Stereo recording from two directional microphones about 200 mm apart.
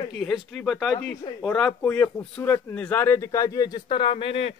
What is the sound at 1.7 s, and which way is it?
Speech, 10° left (ahead or behind).